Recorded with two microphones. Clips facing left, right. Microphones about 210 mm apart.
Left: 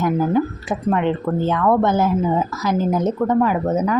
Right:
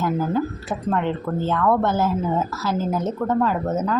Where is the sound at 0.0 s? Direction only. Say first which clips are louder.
Left 4 dB; 15° left (ahead or behind).